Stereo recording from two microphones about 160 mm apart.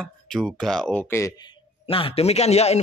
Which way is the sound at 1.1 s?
15° left (ahead or behind).